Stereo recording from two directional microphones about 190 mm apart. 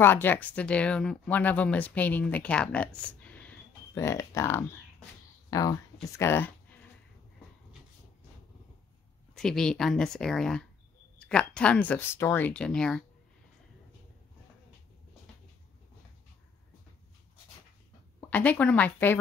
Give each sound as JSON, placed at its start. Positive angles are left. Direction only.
{"t": 0.0, "sound": "speech", "side_deg": 10}
{"t": 9.3, "sound": "speech", "side_deg": 5}
{"t": 18.3, "sound": "speech", "side_deg": 10}